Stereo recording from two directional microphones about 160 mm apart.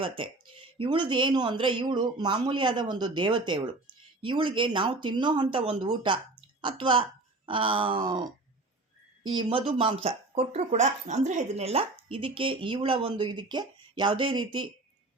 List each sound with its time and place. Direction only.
0.8 s a man's voice: 30° right (ahead or behind)
9.3 s speech: 30° right (ahead or behind)